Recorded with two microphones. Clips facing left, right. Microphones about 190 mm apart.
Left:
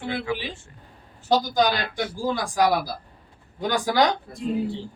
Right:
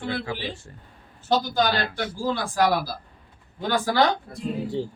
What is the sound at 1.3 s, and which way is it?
A man's voice, 15° left (ahead or behind).